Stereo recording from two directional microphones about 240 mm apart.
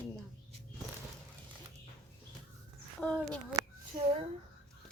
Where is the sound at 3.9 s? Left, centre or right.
Centre.